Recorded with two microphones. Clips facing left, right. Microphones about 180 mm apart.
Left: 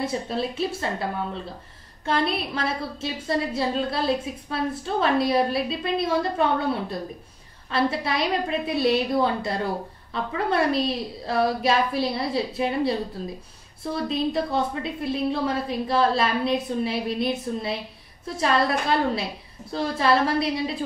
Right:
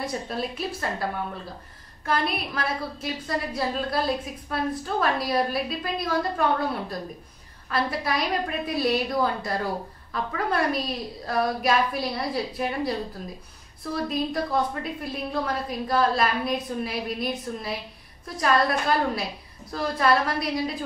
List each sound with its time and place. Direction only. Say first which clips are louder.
0.0 s a woman's voice: left 3 dB; 25° left (ahead or behind)
2.0 s a woman's voice: left 2 dB; 25° left (ahead or behind)
14.0 s a woman's voice: left 3 dB; 25° left (ahead or behind)